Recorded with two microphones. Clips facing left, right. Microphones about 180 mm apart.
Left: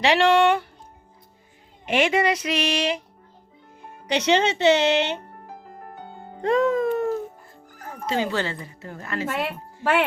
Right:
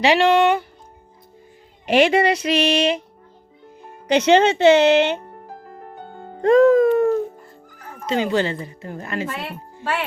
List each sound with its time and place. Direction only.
0.0 s speech: centre (ahead or behind)
1.9 s speech: 35° right (ahead or behind)
4.1 s speech: 50° right (ahead or behind)
6.4 s music: 45° right (ahead or behind)
8.0 s a woman's voice: 20° right (ahead or behind)